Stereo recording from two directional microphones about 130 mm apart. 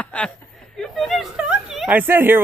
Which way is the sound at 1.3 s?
5° right (ahead or behind).